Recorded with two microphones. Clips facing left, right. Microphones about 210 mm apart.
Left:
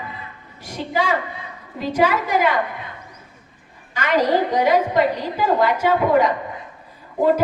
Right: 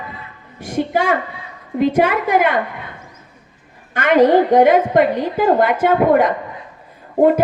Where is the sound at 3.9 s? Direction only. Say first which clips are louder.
Right 7 dB; 55° right (ahead or behind).